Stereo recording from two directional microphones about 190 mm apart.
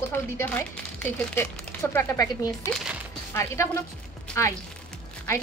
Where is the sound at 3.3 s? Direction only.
15° left (ahead or behind).